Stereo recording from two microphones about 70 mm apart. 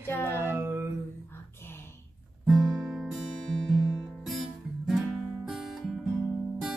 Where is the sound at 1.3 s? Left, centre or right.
Left.